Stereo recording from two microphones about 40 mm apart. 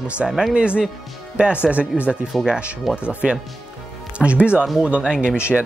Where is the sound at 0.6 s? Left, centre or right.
Right.